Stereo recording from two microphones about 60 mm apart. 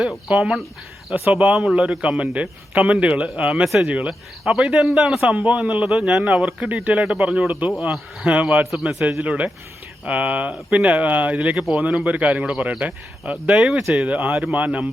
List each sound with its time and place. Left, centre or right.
0.3 s a man's voice: centre
5.3 s a man's voice: right
8.7 s a man's voice: centre
9.2 s a man's voice: right
13.6 s a man's voice: centre
14.0 s a man's voice: right